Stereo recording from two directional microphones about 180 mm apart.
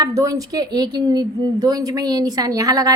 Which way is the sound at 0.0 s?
20° right (ahead or behind).